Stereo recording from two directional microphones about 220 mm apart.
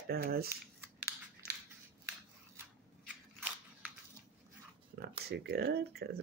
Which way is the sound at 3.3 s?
5° right (ahead or behind).